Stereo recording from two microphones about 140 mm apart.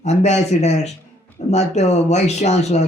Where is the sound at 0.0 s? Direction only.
55° left (ahead or behind).